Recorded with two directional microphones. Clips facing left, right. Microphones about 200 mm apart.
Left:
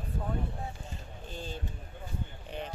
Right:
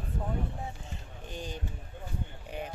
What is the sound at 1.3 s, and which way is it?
Speech, 15° right (ahead or behind).